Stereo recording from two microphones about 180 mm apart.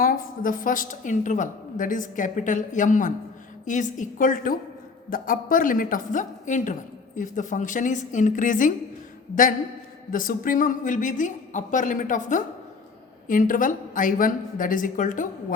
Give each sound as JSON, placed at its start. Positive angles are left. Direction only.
{"t": 0.0, "sound": "a woman's voice", "side_deg": 50}